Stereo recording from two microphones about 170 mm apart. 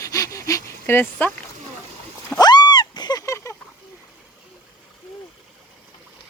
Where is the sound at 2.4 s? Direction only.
25° left (ahead or behind).